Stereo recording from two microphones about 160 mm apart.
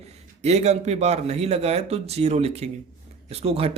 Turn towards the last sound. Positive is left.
turn(degrees=-40)  # may be behind; listen again after turning